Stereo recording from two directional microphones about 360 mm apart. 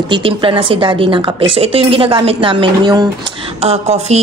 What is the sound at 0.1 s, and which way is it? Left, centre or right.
Speech, centre.